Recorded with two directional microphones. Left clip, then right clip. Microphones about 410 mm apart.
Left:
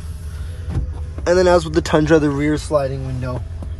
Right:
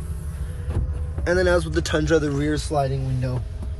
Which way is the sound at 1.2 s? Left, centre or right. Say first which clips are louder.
Left 6 dB; centre.